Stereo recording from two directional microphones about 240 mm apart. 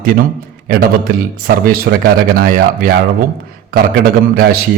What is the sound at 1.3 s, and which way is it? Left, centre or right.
A man's voice, right.